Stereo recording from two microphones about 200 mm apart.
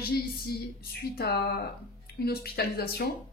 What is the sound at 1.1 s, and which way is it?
Speech, 50° left (ahead or behind).